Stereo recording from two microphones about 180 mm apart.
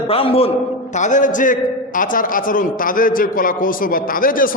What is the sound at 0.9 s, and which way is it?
A man's voice, 45° left (ahead or behind).